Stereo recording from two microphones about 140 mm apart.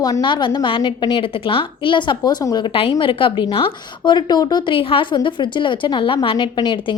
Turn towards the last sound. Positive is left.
turn(degrees=35)  # may be behind; listen again after turning